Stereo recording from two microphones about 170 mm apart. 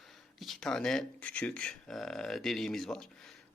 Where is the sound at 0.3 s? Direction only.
Centre (ahead or behind).